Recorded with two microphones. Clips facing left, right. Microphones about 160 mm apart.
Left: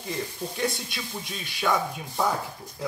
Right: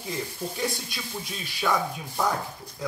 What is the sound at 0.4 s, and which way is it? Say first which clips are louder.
Speech: left 2 dB; 5° right (ahead or behind).